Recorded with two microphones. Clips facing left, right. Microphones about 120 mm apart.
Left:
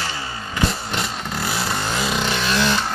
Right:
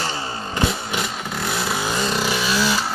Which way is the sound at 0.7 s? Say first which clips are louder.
Right 1 dB; centre (ahead or behind).